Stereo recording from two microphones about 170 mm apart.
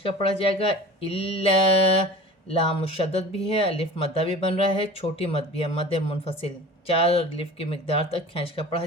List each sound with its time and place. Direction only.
0.0 s speech: 35° left (ahead or behind)
2.5 s speech: 35° left (ahead or behind)